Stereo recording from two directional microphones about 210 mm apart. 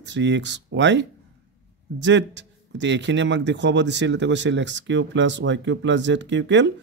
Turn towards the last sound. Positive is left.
turn(degrees=-60)  # may be behind; listen again after turning